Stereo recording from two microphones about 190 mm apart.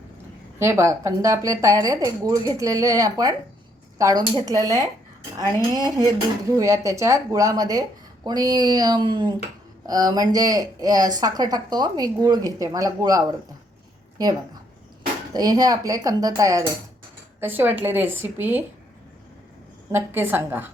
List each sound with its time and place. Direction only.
0.6 s a woman's voice: 15° right (ahead or behind)
19.9 s a woman's voice: 10° right (ahead or behind)